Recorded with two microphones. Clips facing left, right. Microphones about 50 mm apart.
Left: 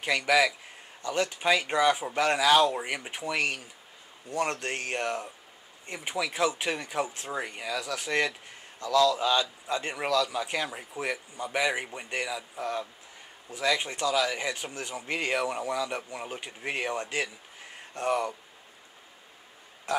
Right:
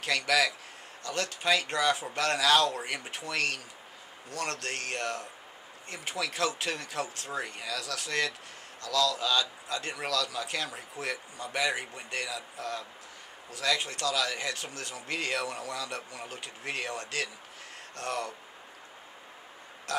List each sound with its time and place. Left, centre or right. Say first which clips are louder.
0.0 s speech: left 3 dB; centre
19.9 s a man's voice: left 4 dB; centre